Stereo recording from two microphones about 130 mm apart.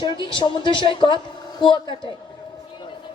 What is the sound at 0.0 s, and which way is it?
A woman's voice, 40° left (ahead or behind).